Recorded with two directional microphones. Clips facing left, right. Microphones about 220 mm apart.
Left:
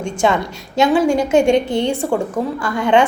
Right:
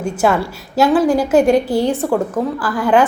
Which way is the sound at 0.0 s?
5° right (ahead or behind).